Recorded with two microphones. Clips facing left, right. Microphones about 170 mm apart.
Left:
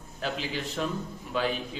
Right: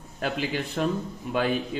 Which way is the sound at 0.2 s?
55° right (ahead or behind).